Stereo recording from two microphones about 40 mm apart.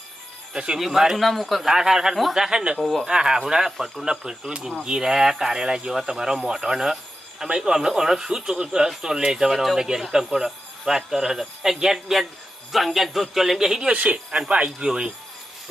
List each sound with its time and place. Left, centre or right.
0.5 s speech: right
0.8 s speech: centre
1.2 s a man's voice: centre
1.6 s speech: centre
2.7 s a man's voice: centre
3.1 s speech: centre
3.8 s a man's voice: centre
4.3 s speech: centre
13.9 s speech: right
14.3 s speech: right